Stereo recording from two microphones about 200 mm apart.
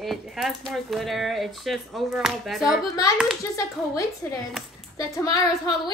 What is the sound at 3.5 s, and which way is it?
A woman's voice, 15° left (ahead or behind).